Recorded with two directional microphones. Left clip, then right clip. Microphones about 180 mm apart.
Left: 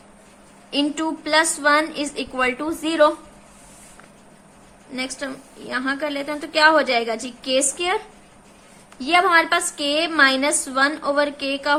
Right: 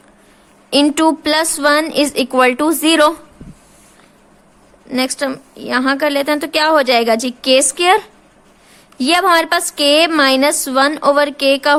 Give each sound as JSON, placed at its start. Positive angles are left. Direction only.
{"t": 0.7, "sound": "a woman's voice", "side_deg": -65}
{"t": 4.9, "sound": "a woman's voice", "side_deg": -60}